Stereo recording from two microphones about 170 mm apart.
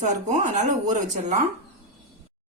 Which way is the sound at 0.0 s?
45° right (ahead or behind).